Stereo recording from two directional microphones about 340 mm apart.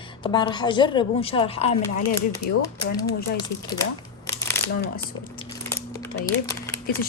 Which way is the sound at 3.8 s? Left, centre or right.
Centre.